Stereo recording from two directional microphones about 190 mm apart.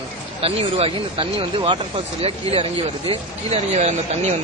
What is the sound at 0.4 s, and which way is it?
Speech, 30° right (ahead or behind).